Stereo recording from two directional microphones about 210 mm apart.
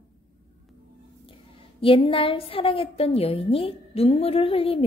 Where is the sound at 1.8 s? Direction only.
25° left (ahead or behind).